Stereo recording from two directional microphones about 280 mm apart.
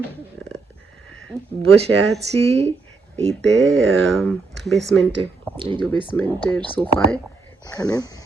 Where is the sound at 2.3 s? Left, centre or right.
Right.